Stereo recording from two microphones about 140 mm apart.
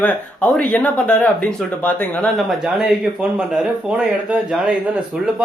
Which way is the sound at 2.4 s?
Centre (ahead or behind).